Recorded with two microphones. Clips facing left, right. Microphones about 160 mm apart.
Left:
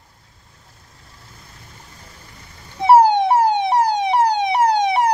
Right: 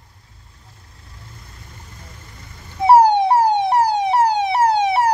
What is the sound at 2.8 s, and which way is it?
Police car, 10° right (ahead or behind).